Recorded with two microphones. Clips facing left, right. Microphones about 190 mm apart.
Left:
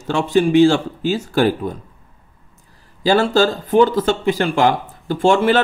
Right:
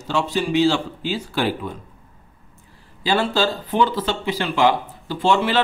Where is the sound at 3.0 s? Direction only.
45° left (ahead or behind).